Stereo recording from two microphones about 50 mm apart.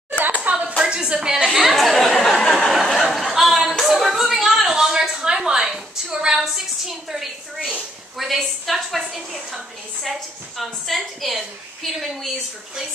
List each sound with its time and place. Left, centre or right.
0.2 s a sound: right; by 6.6 s centre
7.1 s a woman's voice: centre
10.6 s a woman's voice: centre